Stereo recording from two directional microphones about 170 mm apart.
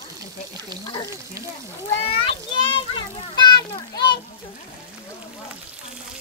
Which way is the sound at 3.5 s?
25° left (ahead or behind).